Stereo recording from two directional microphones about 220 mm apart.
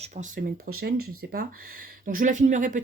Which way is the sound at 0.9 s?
80° right.